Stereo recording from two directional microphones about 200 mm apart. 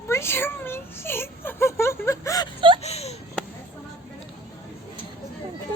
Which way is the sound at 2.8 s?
30° left (ahead or behind).